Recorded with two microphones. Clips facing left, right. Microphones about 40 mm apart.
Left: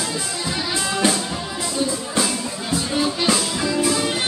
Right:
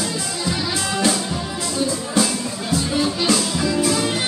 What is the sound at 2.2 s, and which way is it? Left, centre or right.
Music, centre.